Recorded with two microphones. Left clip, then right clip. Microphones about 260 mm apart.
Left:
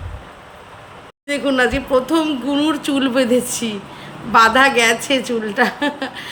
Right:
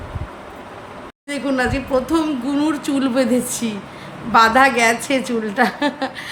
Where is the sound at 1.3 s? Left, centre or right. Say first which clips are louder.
Left 4 dB; centre.